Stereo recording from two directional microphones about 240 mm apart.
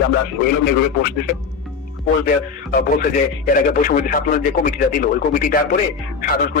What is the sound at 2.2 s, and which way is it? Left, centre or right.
Speech, left.